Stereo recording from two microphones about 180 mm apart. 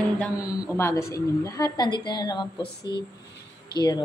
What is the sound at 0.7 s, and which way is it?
A woman's voice, 15° left (ahead or behind).